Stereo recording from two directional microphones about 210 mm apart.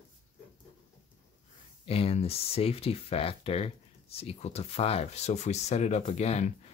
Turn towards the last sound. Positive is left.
turn(degrees=30)  # may be behind; listen again after turning